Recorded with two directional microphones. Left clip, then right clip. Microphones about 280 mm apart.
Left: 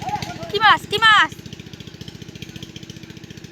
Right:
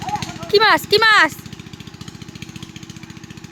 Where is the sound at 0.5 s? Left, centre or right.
Centre.